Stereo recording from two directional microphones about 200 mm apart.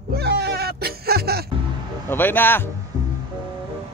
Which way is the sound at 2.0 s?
10° left (ahead or behind).